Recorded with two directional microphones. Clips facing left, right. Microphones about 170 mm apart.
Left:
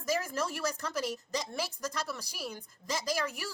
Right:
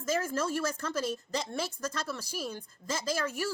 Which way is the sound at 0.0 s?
15° left (ahead or behind).